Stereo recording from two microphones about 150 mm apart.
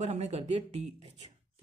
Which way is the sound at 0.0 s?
45° right (ahead or behind).